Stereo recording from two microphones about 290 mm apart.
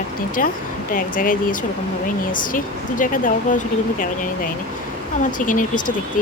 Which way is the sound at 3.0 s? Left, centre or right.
Left.